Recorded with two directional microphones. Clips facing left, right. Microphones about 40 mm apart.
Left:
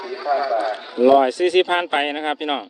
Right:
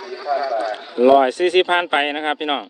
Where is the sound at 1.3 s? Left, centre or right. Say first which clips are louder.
Right 1 dB; right.